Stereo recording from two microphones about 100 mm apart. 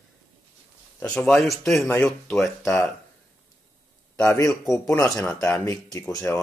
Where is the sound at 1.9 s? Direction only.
20° left (ahead or behind).